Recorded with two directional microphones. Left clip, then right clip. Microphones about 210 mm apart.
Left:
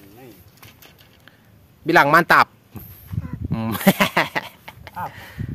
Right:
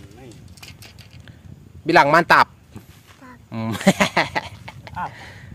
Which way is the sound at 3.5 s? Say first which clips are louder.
Even; 10° left (ahead or behind).